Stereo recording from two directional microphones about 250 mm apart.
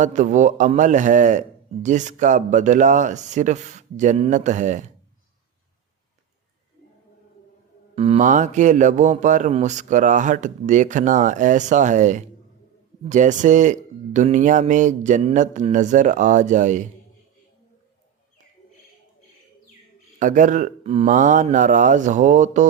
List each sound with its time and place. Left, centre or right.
0.0 s a man's voice: right
7.9 s a man's voice: right
20.1 s speech: right